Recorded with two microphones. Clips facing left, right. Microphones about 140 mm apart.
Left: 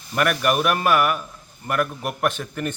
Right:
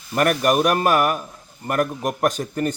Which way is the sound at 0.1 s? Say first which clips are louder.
Right 3 dB; 40° right (ahead or behind).